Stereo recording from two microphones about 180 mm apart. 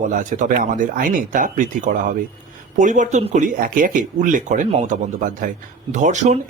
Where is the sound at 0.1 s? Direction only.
45° right (ahead or behind).